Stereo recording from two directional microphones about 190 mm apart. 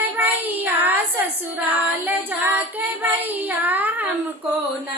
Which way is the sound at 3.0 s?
10° right (ahead or behind).